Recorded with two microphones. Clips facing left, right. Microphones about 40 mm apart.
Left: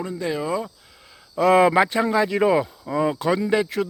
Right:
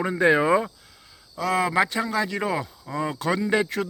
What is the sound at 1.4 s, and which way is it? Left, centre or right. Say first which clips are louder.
Speech: left 8 dB; left.